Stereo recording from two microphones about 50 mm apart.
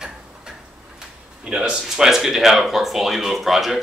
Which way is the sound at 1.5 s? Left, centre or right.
Centre.